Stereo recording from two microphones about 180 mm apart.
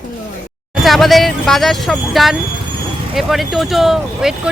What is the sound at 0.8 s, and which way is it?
Speech, centre (ahead or behind).